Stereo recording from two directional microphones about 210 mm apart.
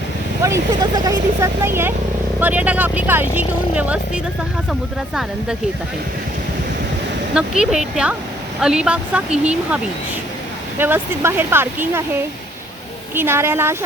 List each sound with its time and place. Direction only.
0.4 s speech: 15° right (ahead or behind)
7.3 s speech: 5° right (ahead or behind)
10.8 s speech: 10° right (ahead or behind)
13.1 s speech: 10° right (ahead or behind)